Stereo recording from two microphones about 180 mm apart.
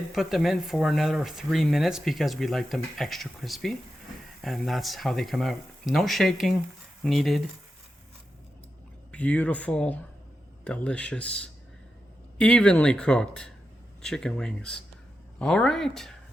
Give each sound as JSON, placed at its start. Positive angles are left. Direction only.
{"t": 0.1, "sound": "speech", "side_deg": 0}
{"t": 9.1, "sound": "speech", "side_deg": 5}